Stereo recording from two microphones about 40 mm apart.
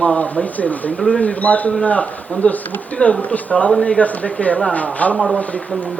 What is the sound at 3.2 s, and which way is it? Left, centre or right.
Speech, left.